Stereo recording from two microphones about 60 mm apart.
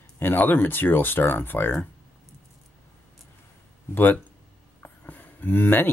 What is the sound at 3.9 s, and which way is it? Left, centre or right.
Speech, left.